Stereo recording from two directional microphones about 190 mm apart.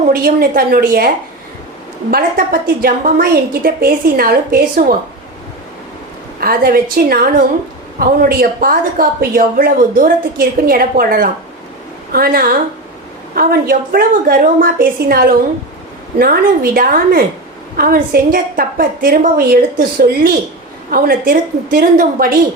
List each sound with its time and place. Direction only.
0.1 s a woman's voice: 50° right (ahead or behind)
2.0 s a woman's voice: 50° right (ahead or behind)
6.4 s a woman's voice: 50° right (ahead or behind)
20.9 s a woman's voice: 50° right (ahead or behind)